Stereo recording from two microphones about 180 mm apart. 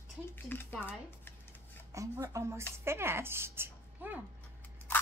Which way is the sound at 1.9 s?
20° right (ahead or behind).